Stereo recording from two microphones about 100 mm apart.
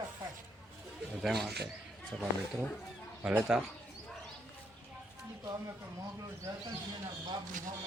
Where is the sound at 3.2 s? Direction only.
10° right (ahead or behind).